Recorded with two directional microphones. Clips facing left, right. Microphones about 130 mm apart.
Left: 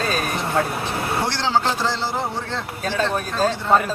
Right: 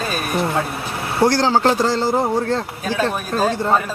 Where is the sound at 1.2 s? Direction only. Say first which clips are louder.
Right 8 dB; 45° right (ahead or behind).